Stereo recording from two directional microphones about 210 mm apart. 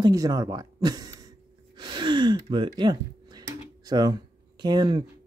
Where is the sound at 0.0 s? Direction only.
15° right (ahead or behind).